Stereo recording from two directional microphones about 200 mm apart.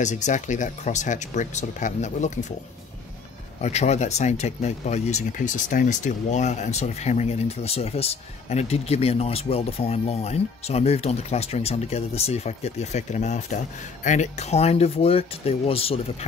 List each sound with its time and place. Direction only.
0.0 s speech: 35° left (ahead or behind)
3.6 s speech: 35° left (ahead or behind)